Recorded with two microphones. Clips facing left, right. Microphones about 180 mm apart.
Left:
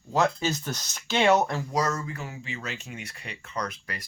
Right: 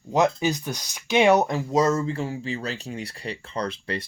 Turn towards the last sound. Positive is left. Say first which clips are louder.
# right 5 dB
turn(degrees=-30)  # may be behind; listen again after turning